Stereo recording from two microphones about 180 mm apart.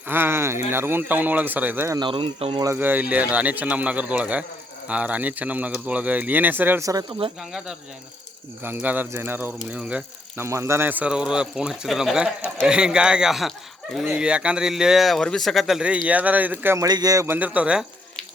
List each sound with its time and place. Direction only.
0.1 s speech: 10° right (ahead or behind)
2.0 s speech: 30° right (ahead or behind)
2.6 s speech: 10° right (ahead or behind)
8.6 s speech: 10° right (ahead or behind)